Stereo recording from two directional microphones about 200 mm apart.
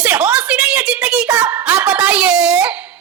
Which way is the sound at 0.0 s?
5° right (ahead or behind).